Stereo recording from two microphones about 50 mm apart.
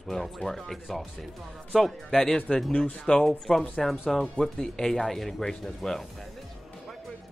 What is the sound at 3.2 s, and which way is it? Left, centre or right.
Speech, centre.